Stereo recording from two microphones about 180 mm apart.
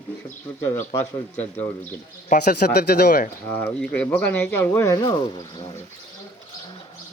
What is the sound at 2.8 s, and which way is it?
Speech, 55° left (ahead or behind).